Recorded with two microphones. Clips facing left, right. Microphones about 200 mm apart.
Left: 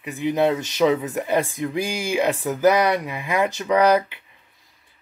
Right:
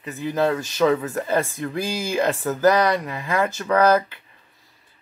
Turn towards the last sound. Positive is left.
turn(degrees=15)  # may be behind; listen again after turning